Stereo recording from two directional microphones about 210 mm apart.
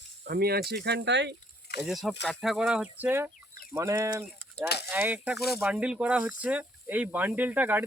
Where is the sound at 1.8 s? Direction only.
Centre (ahead or behind).